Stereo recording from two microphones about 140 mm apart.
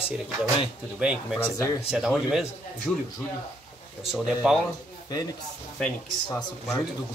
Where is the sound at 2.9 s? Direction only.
10° left (ahead or behind).